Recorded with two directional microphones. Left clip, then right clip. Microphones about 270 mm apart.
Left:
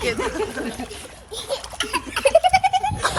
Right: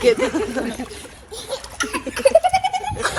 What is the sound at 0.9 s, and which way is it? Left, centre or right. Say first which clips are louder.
Splash: left 1 dB; left.